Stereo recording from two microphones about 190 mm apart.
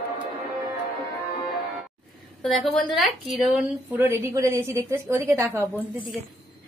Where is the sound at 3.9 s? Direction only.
15° right (ahead or behind).